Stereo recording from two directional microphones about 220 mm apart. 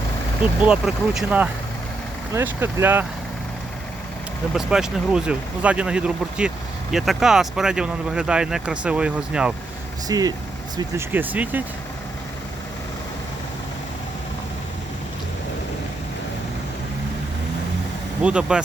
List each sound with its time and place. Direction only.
0.6 s speech: 5° right (ahead or behind)
4.5 s speech: 5° right (ahead or behind)
10.1 s speech: 15° right (ahead or behind)
18.2 s speech: 5° right (ahead or behind)